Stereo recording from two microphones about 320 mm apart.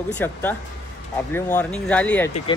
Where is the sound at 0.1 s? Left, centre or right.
Centre.